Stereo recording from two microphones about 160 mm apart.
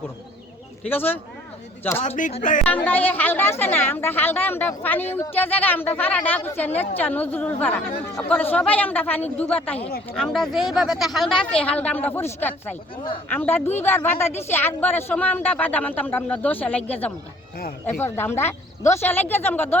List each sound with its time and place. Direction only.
0.9 s a woman's voice: 15° left (ahead or behind)
2.0 s speech: 50° left (ahead or behind)
2.6 s a woman's voice: 10° left (ahead or behind)